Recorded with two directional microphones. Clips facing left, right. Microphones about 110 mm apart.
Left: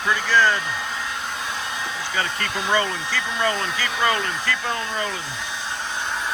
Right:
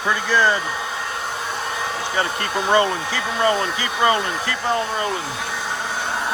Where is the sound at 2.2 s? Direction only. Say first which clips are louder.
Right 4 dB; 40° right (ahead or behind).